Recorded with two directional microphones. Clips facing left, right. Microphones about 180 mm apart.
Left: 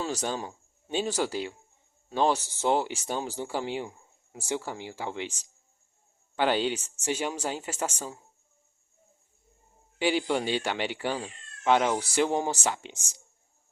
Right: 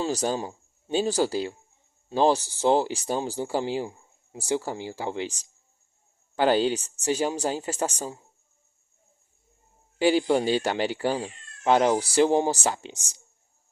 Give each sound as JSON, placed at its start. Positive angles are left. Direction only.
{"t": 0.0, "sound": "speech", "side_deg": -35}
{"t": 6.3, "sound": "speech", "side_deg": -40}
{"t": 10.0, "sound": "speech", "side_deg": -40}